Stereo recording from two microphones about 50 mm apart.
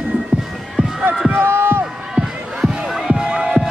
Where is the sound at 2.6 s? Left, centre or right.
Centre.